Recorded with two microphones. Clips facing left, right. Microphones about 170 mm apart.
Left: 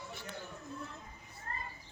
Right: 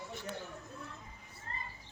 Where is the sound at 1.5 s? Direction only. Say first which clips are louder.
Left 2 dB; 50° left (ahead or behind).